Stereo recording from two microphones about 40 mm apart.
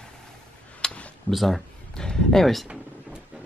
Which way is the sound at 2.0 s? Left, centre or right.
Centre.